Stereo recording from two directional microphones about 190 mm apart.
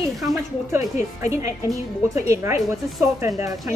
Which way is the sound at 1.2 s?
15° right (ahead or behind).